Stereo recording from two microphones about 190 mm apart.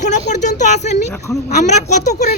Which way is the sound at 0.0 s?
40° left (ahead or behind).